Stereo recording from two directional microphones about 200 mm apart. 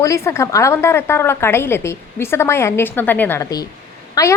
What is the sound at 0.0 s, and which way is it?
A woman's voice, 15° left (ahead or behind).